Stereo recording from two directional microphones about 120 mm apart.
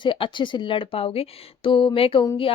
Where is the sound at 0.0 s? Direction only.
45° left (ahead or behind).